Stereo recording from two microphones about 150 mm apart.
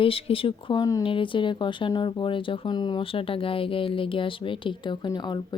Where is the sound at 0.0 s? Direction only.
40° left (ahead or behind).